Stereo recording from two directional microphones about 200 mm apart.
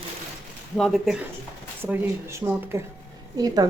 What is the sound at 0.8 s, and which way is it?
Speech, centre (ahead or behind).